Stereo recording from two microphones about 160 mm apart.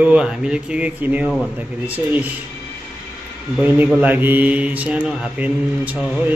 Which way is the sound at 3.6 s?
10° right (ahead or behind).